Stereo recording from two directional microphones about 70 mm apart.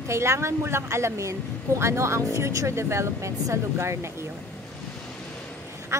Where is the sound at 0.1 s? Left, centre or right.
Right.